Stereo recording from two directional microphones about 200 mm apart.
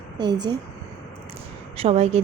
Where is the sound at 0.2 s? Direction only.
20° right (ahead or behind).